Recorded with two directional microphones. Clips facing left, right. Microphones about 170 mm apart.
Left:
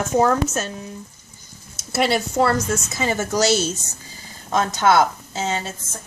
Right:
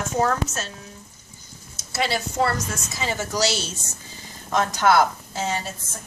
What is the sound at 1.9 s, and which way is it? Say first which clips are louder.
A woman's voice: left 5 dB; 60° left (ahead or behind).